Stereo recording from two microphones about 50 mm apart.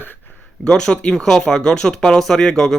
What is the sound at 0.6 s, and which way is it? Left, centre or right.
Speech, centre.